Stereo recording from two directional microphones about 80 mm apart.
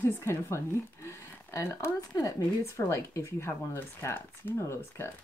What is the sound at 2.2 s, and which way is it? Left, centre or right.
Speech, left.